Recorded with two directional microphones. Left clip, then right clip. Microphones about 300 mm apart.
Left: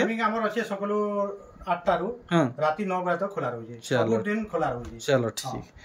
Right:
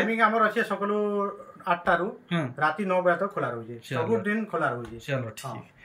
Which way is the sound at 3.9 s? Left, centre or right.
Centre.